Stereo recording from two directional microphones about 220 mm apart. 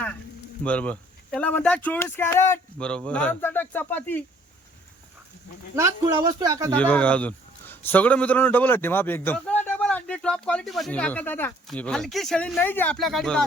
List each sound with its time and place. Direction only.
0.6 s a man's voice: 5° left (ahead or behind)
5.7 s a man's voice: 15° right (ahead or behind)
6.7 s a man's voice: 5° left (ahead or behind)